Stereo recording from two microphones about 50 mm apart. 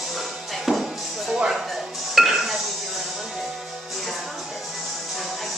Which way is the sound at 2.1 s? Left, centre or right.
Centre.